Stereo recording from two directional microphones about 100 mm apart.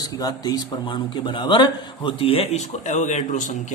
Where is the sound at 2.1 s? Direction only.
70° left (ahead or behind).